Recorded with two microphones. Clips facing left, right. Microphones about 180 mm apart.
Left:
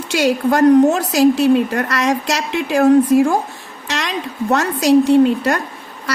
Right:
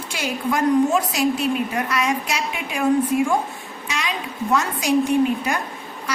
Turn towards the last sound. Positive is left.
turn(degrees=75)  # may be behind; listen again after turning